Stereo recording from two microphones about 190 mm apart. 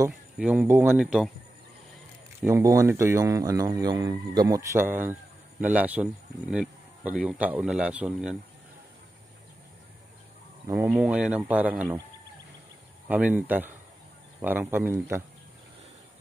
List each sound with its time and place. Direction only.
0.1 s speech: 5° right (ahead or behind)
2.4 s speech: 15° right (ahead or behind)
10.7 s speech: 10° right (ahead or behind)
13.1 s speech: 10° right (ahead or behind)